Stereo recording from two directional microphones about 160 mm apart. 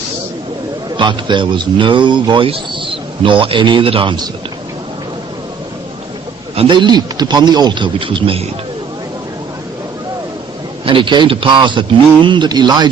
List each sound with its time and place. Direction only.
0.9 s speech: 30° right (ahead or behind)
6.6 s speech: 30° right (ahead or behind)
10.8 s speech: 30° right (ahead or behind)